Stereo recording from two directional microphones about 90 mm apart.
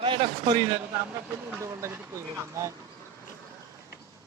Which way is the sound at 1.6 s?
30° right (ahead or behind).